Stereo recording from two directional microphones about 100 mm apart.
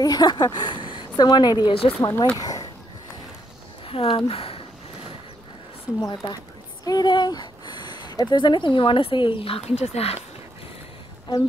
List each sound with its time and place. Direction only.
0.0 s a woman's voice: 45° left (ahead or behind)
1.7 s speech: 65° left (ahead or behind)
2.3 s a sound: 40° left (ahead or behind)
3.8 s speech: 65° left (ahead or behind)
5.9 s speech: 45° left (ahead or behind); by 10.2 s 90° left